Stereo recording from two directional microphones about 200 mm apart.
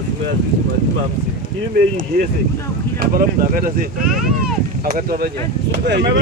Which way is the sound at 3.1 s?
45° right (ahead or behind).